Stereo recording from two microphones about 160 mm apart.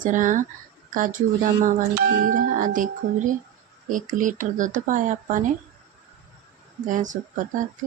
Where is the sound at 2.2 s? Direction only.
55° right (ahead or behind).